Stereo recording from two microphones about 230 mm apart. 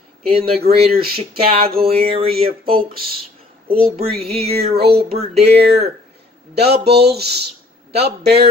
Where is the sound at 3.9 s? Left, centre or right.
Right.